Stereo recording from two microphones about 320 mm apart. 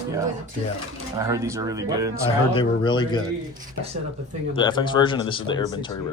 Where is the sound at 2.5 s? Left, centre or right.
Centre.